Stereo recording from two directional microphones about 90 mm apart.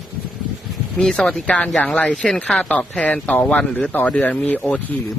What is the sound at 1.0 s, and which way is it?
Speech, 5° left (ahead or behind).